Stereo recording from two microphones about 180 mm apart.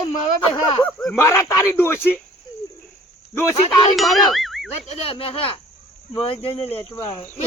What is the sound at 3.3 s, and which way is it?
Speech, 15° left (ahead or behind).